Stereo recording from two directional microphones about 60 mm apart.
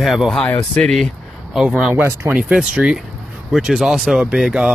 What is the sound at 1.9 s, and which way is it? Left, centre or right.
Speech, right.